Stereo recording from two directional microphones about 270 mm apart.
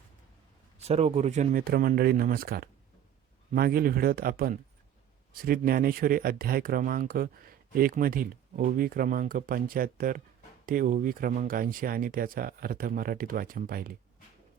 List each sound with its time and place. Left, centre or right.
0.8 s speech: right